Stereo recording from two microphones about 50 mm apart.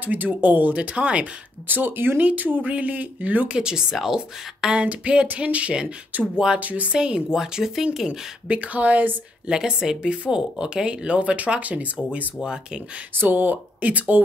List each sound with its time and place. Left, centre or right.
0.0 s speech: right
1.7 s speech: right
3.5 s speech: centre
7.0 s speech: centre
8.1 s speech: right
9.5 s speech: centre
13.1 s speech: right